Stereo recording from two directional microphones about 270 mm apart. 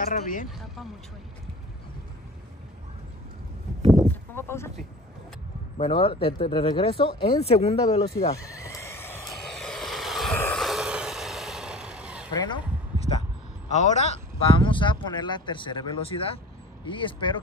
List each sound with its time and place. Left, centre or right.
0.0 s speech: left
4.1 s speech: centre
5.8 s speech: centre
8.4 s vehicle: centre
12.3 s a sound: centre
13.7 s speech: left